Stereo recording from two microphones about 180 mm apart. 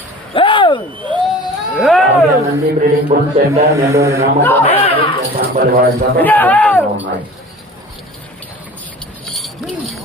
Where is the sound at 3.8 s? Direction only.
15° right (ahead or behind).